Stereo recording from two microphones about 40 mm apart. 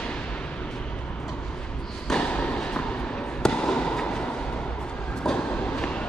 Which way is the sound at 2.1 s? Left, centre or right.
Left.